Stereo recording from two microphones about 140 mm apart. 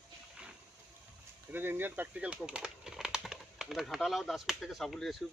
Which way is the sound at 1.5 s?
15° right (ahead or behind).